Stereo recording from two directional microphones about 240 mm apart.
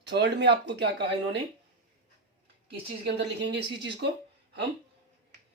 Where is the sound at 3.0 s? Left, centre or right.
Right.